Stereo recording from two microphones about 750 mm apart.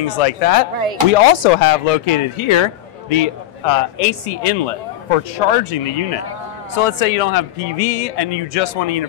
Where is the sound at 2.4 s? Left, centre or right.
Left.